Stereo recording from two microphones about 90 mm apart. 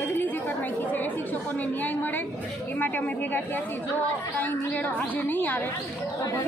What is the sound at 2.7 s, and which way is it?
Speech, 20° left (ahead or behind).